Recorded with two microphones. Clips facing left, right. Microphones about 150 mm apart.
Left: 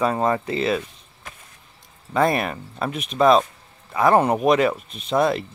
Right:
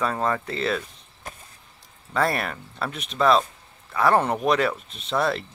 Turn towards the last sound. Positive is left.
turn(degrees=15)  # may be behind; listen again after turning